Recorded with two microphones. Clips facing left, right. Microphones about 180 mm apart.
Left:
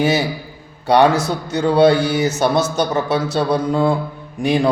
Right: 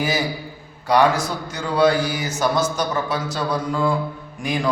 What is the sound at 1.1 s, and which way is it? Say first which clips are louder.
Mantra: left 6 dB; 70° left (ahead or behind).